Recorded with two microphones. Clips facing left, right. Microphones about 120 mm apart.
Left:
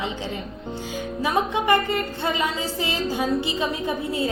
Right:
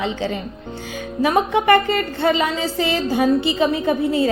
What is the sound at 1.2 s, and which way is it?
A woman's voice, 70° right (ahead or behind).